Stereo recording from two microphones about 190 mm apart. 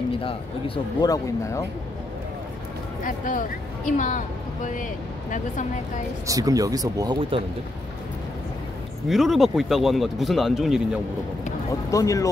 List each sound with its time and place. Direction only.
0.2 s a man's voice: 30° left (ahead or behind)
1.1 s speech: 15° left (ahead or behind)
3.0 s speech: 45° left (ahead or behind)
6.2 s speech: 20° right (ahead or behind)
9.1 s speech: centre (ahead or behind)
11.9 s speech: 15° left (ahead or behind)